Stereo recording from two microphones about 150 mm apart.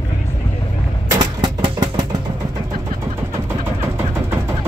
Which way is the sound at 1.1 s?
30° right (ahead or behind).